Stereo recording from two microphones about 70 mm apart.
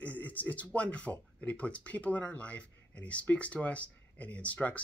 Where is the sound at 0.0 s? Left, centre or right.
Left.